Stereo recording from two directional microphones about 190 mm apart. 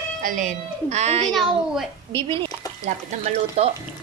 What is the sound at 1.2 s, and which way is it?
Speech, centre (ahead or behind).